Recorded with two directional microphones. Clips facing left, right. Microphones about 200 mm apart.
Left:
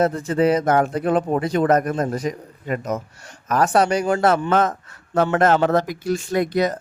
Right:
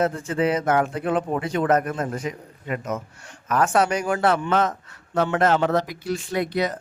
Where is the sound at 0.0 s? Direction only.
40° left (ahead or behind).